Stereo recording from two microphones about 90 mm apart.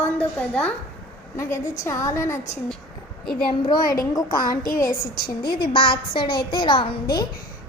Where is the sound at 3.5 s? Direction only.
55° left (ahead or behind).